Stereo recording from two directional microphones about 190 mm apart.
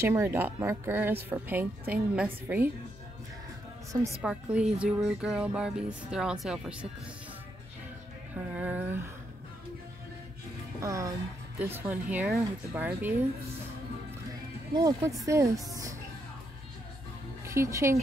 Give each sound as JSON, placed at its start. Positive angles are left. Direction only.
{"t": 0.0, "sound": "a woman's voice", "side_deg": -15}
{"t": 4.2, "sound": "speech", "side_deg": -5}
{"t": 8.5, "sound": "a woman's voice", "side_deg": -10}
{"t": 10.8, "sound": "a woman's voice", "side_deg": -15}
{"t": 14.7, "sound": "a woman's voice", "side_deg": -20}
{"t": 15.7, "sound": "music", "side_deg": -20}
{"t": 17.5, "sound": "a woman's voice", "side_deg": -15}